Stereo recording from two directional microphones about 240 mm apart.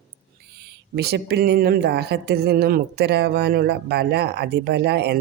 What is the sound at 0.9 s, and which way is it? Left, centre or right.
Speech, right.